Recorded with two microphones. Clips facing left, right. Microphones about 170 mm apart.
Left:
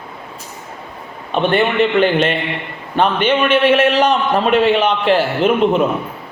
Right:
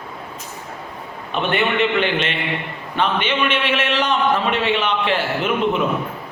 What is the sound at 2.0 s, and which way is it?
A man's voice, 40° left (ahead or behind).